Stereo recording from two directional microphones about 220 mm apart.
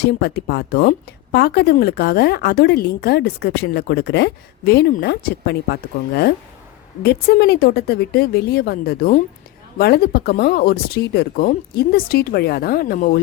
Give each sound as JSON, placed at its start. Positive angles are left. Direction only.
{"t": 0.2, "sound": "speech", "side_deg": 50}
{"t": 7.0, "sound": "speech", "side_deg": 45}